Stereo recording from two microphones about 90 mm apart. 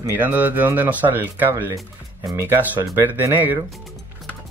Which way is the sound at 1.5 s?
35° right (ahead or behind).